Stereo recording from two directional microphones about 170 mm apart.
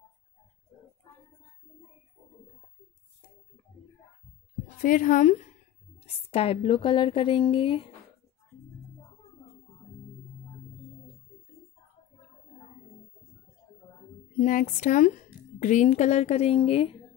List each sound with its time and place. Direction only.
4.6 s a woman's voice: 50° left (ahead or behind)
6.3 s a woman's voice: 35° left (ahead or behind)
14.4 s a woman's voice: 50° left (ahead or behind); by 16.9 s 35° left (ahead or behind)